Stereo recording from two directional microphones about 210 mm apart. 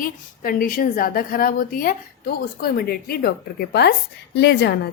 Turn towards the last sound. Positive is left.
turn(degrees=50)  # may be behind; listen again after turning